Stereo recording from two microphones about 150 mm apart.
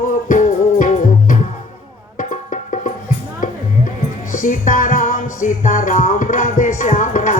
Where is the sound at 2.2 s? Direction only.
50° left (ahead or behind).